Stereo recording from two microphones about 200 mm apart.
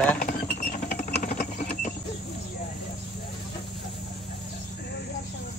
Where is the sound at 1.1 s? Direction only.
45° left (ahead or behind).